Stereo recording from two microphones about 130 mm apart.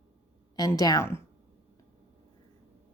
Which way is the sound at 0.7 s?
30° left (ahead or behind).